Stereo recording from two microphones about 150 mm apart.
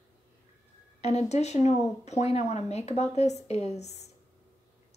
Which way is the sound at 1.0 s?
45° left (ahead or behind).